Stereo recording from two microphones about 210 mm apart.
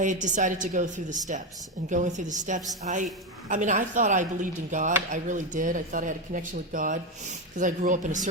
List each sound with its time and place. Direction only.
0.0 s speech: 35° right (ahead or behind)